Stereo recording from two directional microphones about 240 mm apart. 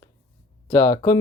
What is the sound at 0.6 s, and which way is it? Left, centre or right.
Speech, centre.